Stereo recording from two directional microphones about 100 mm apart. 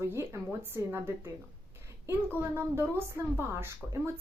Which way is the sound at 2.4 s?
25° right (ahead or behind).